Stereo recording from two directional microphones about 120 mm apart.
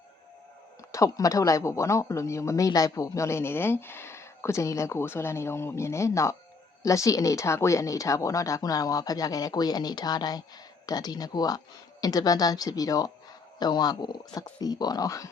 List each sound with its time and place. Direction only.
0.9 s speech: 25° left (ahead or behind)